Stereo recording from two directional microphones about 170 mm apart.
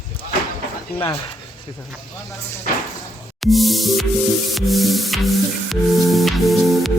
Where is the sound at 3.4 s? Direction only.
Centre (ahead or behind).